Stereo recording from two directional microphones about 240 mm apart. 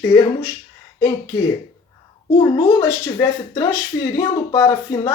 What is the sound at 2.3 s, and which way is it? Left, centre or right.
Speech, centre.